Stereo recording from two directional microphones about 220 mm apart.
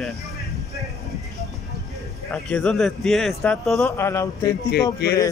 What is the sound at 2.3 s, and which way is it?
A man's voice, 5° left (ahead or behind).